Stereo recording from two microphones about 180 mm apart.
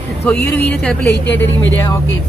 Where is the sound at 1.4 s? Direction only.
90° left.